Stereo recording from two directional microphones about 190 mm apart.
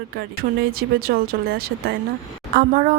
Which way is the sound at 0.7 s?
50° right (ahead or behind).